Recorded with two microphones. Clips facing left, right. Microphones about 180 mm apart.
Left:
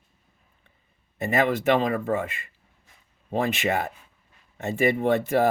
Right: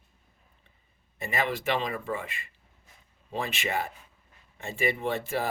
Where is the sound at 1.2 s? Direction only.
55° left (ahead or behind).